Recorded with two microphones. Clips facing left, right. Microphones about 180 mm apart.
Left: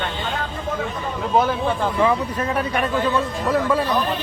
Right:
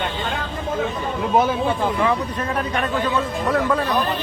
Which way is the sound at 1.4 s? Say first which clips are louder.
Even; 10° right (ahead or behind).